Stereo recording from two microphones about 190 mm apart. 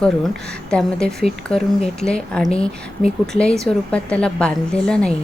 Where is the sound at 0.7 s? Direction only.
5° left (ahead or behind).